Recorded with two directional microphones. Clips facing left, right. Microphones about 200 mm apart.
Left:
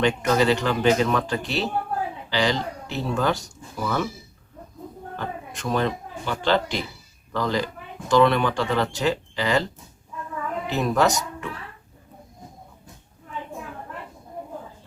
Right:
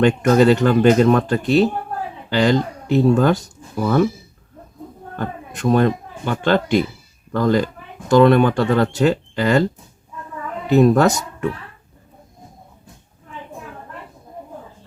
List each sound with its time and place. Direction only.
0.0 s speech: 50° right (ahead or behind)
5.1 s speech: 50° right (ahead or behind)
10.8 s speech: 55° right (ahead or behind)